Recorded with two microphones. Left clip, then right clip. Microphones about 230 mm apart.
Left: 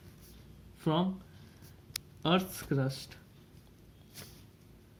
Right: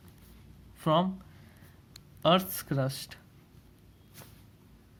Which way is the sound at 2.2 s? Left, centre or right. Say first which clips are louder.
Right 6 dB; right.